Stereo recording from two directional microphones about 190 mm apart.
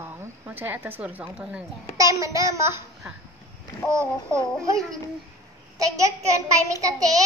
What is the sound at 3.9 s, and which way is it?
Speech, 15° right (ahead or behind).